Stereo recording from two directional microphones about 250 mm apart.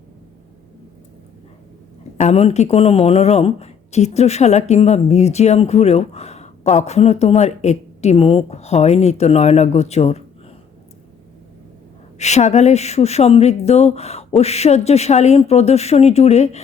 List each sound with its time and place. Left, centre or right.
2.1 s speech: left
12.2 s speech: left